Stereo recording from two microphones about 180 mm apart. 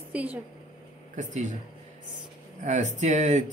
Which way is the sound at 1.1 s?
40° right (ahead or behind).